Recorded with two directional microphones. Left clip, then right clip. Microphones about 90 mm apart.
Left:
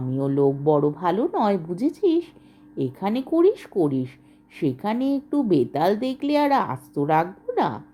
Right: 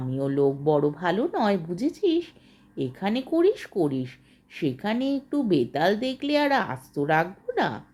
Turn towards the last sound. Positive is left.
turn(degrees=55)  # may be behind; listen again after turning